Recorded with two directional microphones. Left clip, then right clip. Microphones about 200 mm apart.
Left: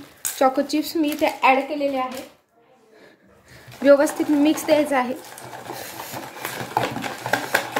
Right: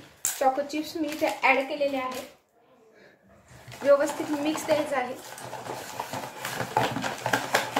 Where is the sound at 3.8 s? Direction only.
50° left (ahead or behind).